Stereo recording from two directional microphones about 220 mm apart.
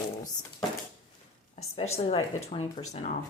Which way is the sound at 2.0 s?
30° left (ahead or behind).